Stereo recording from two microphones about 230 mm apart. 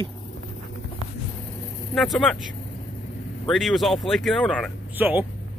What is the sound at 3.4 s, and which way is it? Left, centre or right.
Speech, centre.